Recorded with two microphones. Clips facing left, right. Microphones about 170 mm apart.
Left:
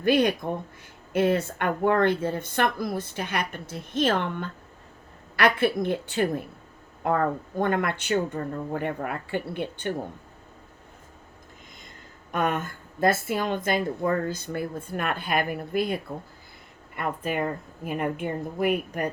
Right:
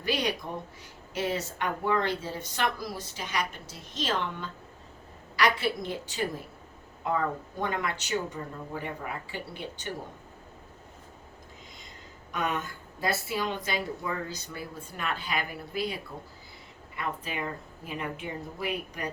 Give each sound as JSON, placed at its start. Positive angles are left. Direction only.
{"t": 0.0, "sound": "a woman's voice", "side_deg": 55}
{"t": 12.3, "sound": "a woman's voice", "side_deg": 50}